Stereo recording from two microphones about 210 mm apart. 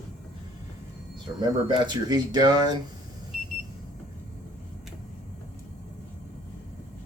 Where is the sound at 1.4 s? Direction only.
20° right (ahead or behind).